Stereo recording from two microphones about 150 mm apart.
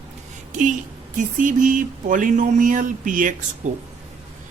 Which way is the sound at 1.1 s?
60° right (ahead or behind).